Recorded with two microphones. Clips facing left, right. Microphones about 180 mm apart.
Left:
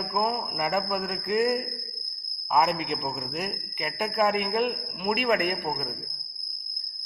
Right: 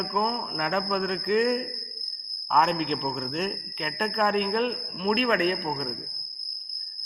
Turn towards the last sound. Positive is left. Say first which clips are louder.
# right 2 dB
turn(degrees=10)  # may be behind; listen again after turning